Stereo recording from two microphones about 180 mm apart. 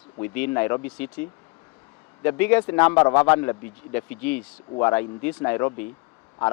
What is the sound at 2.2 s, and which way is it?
Speech, 10° left (ahead or behind).